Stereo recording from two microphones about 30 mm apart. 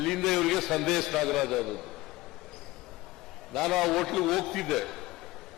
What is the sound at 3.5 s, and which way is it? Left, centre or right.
A man's voice, centre.